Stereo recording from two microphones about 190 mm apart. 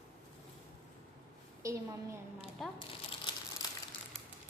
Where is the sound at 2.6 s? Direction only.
Centre (ahead or behind).